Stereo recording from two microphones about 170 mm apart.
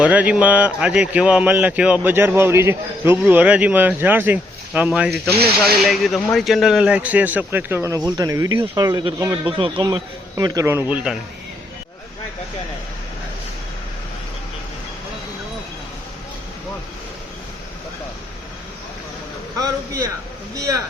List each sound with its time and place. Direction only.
0.0 s a man's voice: 10° right (ahead or behind)